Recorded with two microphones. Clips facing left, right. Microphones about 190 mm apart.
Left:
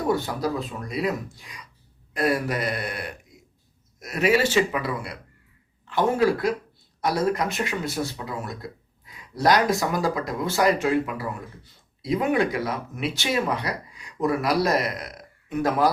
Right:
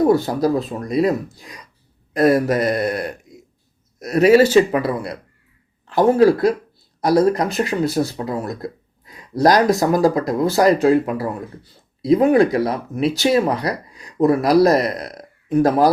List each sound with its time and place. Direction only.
0.0 s speech: 40° right (ahead or behind)